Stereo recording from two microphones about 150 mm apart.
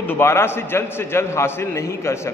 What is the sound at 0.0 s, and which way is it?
A man's voice, 15° left (ahead or behind).